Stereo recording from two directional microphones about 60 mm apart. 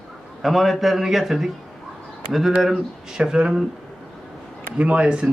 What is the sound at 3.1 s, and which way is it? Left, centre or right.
Speech, centre.